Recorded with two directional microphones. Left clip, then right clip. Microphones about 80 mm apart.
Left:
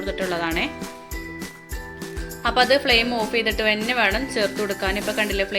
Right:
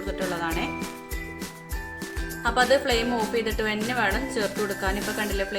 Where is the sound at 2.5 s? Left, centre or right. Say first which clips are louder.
Left 4 dB; left.